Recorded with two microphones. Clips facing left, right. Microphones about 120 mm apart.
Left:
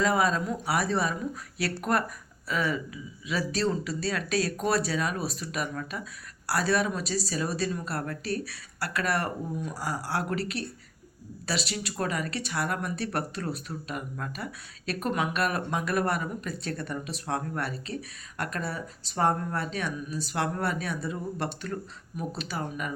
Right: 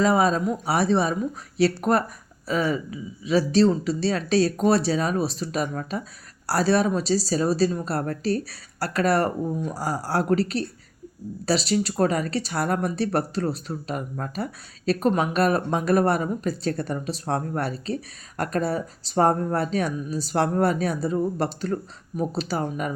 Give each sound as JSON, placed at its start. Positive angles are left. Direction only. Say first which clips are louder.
{"t": 0.0, "sound": "speech", "louder": "right 5 dB", "side_deg": -25}